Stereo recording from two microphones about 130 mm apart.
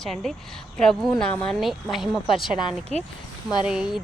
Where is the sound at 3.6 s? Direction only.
5° right (ahead or behind).